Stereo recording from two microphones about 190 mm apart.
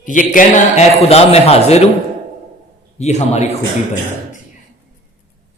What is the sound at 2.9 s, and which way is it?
Speech, 35° left (ahead or behind).